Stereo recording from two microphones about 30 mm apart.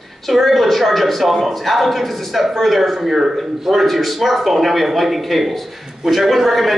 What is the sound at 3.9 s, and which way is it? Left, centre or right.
A man's voice, centre.